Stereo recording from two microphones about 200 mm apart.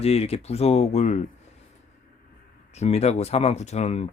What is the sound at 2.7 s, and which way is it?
Speech, 35° left (ahead or behind).